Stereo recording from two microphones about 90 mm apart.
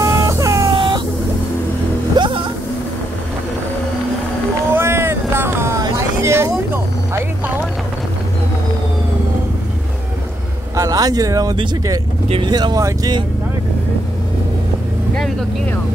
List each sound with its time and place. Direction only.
0.0 s music: 35° right (ahead or behind)
0.7 s vehicle: 55° right (ahead or behind)
2.1 s vehicle: 65° right (ahead or behind)
4.7 s boat: 25° right (ahead or behind)
6.2 s vehicle: 30° right (ahead or behind)
10.8 s speech: 45° right (ahead or behind)
12.4 s speech: 50° right (ahead or behind)